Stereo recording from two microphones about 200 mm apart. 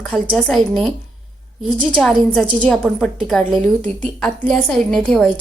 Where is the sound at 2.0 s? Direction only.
5° left (ahead or behind).